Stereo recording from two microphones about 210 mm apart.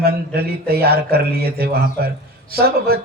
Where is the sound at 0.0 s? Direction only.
50° right (ahead or behind).